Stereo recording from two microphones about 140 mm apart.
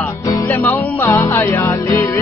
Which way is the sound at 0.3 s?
15° left (ahead or behind).